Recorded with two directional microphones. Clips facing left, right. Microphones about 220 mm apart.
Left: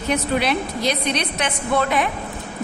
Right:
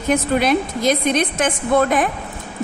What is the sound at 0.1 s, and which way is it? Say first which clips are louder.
A woman's voice: right 4 dB; 45° right (ahead or behind).